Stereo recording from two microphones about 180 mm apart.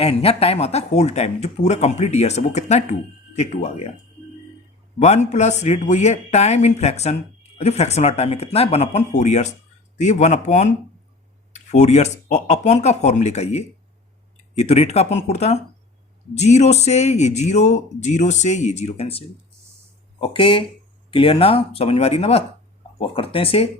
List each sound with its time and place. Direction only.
0.0 s speech: 35° left (ahead or behind)
4.9 s speech: 40° left (ahead or behind)